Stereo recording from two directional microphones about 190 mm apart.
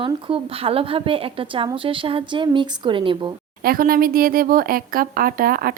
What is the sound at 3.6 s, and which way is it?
Speech, 50° right (ahead or behind).